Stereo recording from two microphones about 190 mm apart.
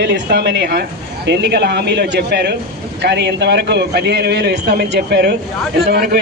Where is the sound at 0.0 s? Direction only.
60° right (ahead or behind).